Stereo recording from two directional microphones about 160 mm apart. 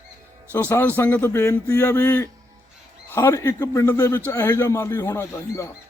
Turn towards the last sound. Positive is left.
turn(degrees=15)  # may be behind; listen again after turning